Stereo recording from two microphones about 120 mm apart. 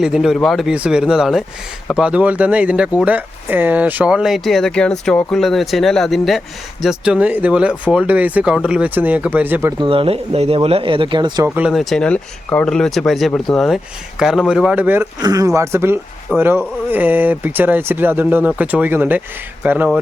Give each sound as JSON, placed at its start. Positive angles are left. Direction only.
{"t": 0.0, "sound": "speech", "side_deg": -5}
{"t": 9.8, "sound": "speech", "side_deg": -50}
{"t": 11.4, "sound": "speech", "side_deg": -15}
{"t": 11.7, "sound": "speech", "side_deg": 0}
{"t": 15.2, "sound": "speech", "side_deg": -30}